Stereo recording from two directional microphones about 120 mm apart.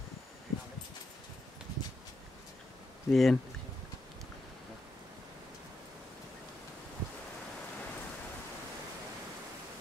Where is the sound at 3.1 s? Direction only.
Centre (ahead or behind).